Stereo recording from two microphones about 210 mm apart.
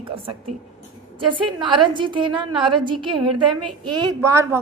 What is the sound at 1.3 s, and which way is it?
A woman's voice, 25° right (ahead or behind).